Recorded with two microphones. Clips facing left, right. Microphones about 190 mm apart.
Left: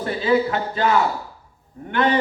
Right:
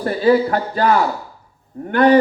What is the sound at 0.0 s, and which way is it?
A man's voice, 45° right (ahead or behind).